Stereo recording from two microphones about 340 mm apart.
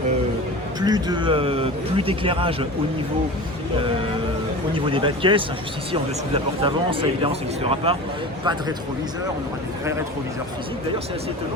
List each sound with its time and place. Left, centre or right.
0.8 s speech: centre
4.7 s speech: centre